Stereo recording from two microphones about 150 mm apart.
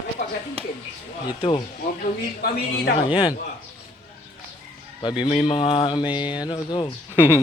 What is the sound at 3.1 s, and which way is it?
Speech, 30° left (ahead or behind).